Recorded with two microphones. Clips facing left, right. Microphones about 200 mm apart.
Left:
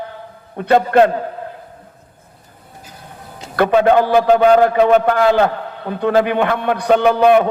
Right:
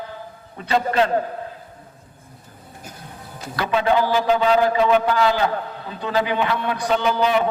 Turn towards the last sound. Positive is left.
turn(degrees=55)  # may be behind; listen again after turning